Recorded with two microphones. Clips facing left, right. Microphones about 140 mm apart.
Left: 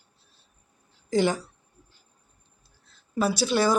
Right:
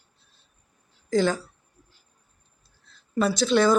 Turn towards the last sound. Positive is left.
turn(degrees=10)  # may be behind; listen again after turning